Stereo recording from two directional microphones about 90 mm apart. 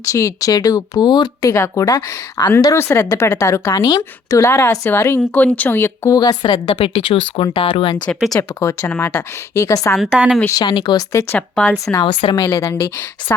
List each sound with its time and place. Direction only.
0.0 s speech: 35° left (ahead or behind); by 1.3 s 50° left (ahead or behind)
1.4 s speech: 35° left (ahead or behind)
2.7 s speech: 30° left (ahead or behind)
6.1 s speech: 45° left (ahead or behind)
6.4 s a woman's voice: 65° left (ahead or behind)
8.4 s speech: 30° left (ahead or behind)
10.1 s a woman's voice: 10° right (ahead or behind)
10.5 s speech: 55° left (ahead or behind)
11.1 s speech: 35° left (ahead or behind)
11.3 s speech: 15° left (ahead or behind)
12.2 s speech: 55° left (ahead or behind)
12.5 s speech: 30° left (ahead or behind)